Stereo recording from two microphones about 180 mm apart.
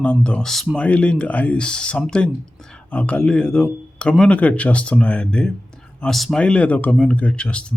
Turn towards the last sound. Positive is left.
turn(degrees=5)  # may be behind; listen again after turning